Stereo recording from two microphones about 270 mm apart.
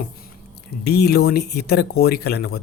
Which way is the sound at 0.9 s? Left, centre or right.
Left.